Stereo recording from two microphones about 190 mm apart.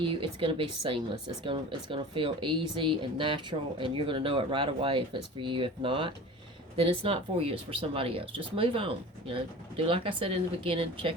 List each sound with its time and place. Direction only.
0.0 s speech: 25° right (ahead or behind)